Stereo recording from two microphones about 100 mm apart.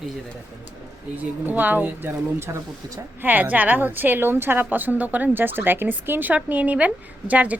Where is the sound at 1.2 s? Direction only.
20° right (ahead or behind).